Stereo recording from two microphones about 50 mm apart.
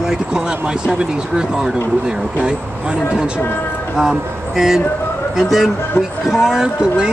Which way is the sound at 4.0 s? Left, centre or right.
Centre.